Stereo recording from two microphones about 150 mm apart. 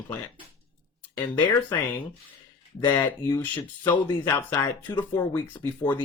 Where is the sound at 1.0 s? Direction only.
10° left (ahead or behind).